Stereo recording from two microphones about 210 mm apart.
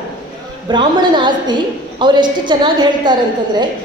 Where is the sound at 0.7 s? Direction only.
20° right (ahead or behind).